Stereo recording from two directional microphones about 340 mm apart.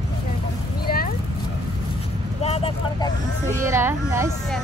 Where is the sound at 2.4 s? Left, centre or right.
Centre.